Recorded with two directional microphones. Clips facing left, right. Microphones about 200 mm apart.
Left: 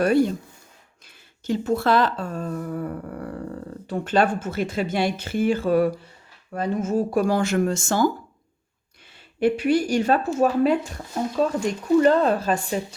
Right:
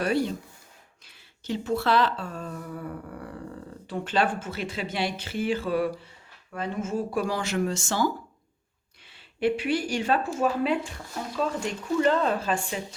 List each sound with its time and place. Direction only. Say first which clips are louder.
0.0 s speech: left 7 dB; 50° left (ahead or behind)
9.4 s speech: left 5 dB; 45° left (ahead or behind)